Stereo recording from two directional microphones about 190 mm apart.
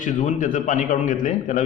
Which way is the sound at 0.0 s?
40° left (ahead or behind).